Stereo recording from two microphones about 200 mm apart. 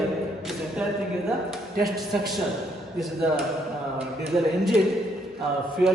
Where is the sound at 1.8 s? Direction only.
Centre (ahead or behind).